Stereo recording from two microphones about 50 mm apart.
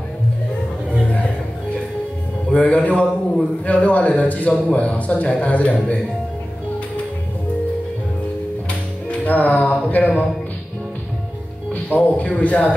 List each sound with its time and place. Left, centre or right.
2.5 s a man's voice: left
9.2 s a sound: left
11.7 s speech: left